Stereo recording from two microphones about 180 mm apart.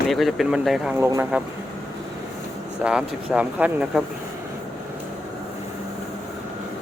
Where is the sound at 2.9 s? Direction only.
5° right (ahead or behind).